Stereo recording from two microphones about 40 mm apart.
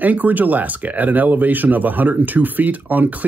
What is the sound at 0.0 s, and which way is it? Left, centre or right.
Speech, right.